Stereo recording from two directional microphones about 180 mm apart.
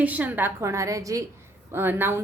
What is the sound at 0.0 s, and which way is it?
A woman's voice, 10° right (ahead or behind).